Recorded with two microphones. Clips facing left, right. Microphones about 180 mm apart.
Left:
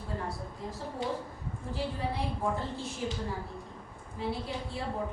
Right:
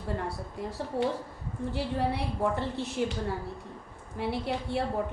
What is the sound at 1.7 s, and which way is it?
A woman's voice, 70° right (ahead or behind).